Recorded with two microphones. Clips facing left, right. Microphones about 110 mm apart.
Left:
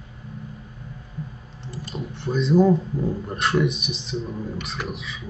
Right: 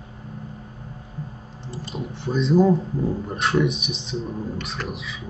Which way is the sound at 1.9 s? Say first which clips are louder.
Even; centre (ahead or behind).